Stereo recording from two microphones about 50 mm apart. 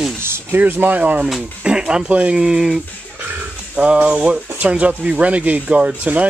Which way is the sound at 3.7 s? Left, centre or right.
Right.